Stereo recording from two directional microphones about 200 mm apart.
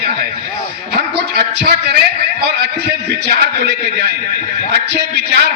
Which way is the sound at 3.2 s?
55° right (ahead or behind).